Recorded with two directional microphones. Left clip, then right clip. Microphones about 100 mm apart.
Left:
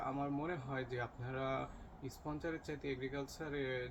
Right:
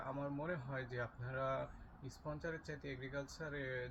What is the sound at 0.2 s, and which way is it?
Speech, 30° left (ahead or behind).